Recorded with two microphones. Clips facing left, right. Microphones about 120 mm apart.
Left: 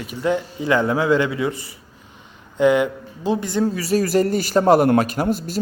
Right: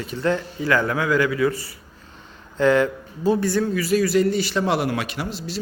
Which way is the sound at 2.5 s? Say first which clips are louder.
Left 1 dB; 15° left (ahead or behind).